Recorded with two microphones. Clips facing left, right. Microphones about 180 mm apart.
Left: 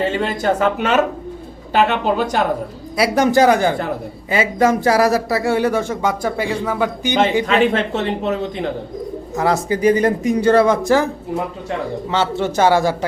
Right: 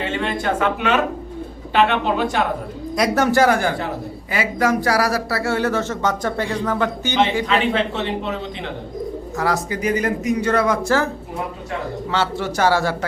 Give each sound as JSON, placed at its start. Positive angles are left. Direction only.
{"t": 0.0, "sound": "speech", "side_deg": 40}
{"t": 2.9, "sound": "speech", "side_deg": 5}
{"t": 3.2, "sound": "speech", "side_deg": 20}
{"t": 7.4, "sound": "speech", "side_deg": 45}
{"t": 9.3, "sound": "speech", "side_deg": 25}
{"t": 10.8, "sound": "speech", "side_deg": 15}
{"t": 12.1, "sound": "speech", "side_deg": 20}